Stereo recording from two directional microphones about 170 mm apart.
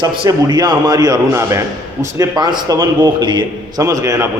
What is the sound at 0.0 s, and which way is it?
A man's voice, 25° right (ahead or behind).